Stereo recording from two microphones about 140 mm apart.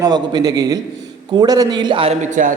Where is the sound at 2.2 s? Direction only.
65° right (ahead or behind).